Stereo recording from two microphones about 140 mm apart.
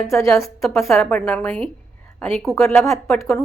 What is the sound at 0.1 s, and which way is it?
Speech, 20° left (ahead or behind).